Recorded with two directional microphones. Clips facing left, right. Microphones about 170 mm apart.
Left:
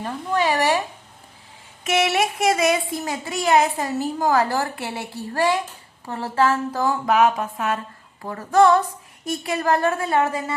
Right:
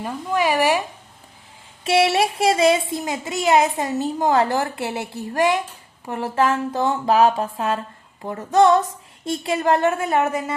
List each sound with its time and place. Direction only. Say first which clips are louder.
0.0 s speech: right 1 dB; 10° right (ahead or behind)
1.8 s a woman's voice: right 3 dB; 30° right (ahead or behind)